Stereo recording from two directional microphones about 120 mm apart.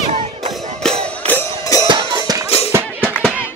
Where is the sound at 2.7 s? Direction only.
15° right (ahead or behind).